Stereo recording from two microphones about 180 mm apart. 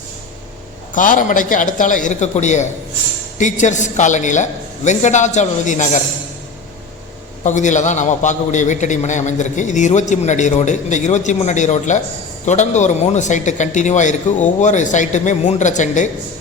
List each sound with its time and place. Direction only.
0.9 s a man's voice: 45° left (ahead or behind)
7.4 s a man's voice: 40° left (ahead or behind)